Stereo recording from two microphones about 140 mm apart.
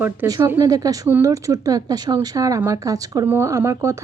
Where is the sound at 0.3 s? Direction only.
25° right (ahead or behind).